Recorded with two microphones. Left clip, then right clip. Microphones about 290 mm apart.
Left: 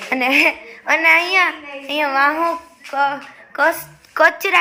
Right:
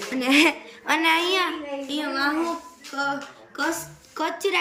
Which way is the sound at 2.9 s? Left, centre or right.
Left.